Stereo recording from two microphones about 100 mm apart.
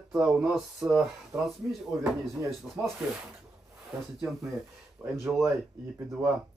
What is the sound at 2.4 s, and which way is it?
Speech, 30° right (ahead or behind).